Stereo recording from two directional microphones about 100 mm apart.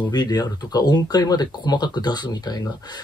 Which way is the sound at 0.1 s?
45° left (ahead or behind).